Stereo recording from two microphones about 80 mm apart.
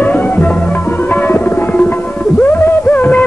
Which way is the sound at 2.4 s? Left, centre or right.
Left.